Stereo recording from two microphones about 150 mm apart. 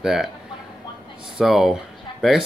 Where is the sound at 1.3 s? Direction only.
Centre (ahead or behind).